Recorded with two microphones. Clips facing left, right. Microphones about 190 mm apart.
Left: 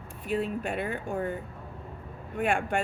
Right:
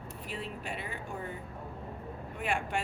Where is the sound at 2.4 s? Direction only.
50° left (ahead or behind).